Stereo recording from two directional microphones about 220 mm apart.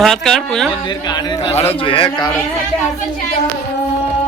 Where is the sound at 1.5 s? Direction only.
25° left (ahead or behind).